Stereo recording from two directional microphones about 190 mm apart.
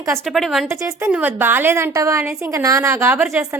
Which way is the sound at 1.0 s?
10° right (ahead or behind).